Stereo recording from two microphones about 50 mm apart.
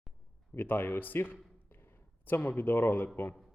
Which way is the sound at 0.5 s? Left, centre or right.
Left.